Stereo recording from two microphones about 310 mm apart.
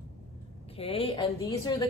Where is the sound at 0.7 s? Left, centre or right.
Centre.